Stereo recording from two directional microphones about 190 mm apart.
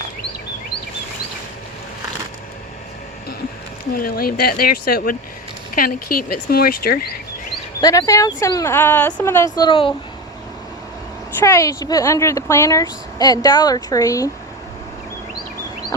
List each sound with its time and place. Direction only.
3.9 s speech: 50° left (ahead or behind)
7.8 s speech: 20° left (ahead or behind)
9.6 s speech: 25° left (ahead or behind)
11.3 s speech: 15° left (ahead or behind)